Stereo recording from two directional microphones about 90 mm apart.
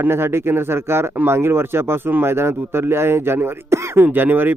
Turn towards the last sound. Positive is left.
turn(degrees=-20)  # may be behind; listen again after turning